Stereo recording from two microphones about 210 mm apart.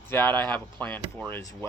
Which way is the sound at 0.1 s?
10° left (ahead or behind).